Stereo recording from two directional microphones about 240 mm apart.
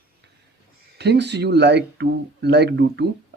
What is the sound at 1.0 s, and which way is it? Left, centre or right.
Speech, right.